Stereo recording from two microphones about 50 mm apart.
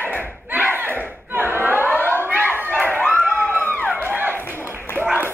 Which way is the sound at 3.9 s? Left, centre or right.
Right.